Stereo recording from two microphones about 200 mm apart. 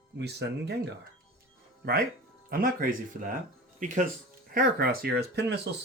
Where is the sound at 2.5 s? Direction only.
45° right (ahead or behind).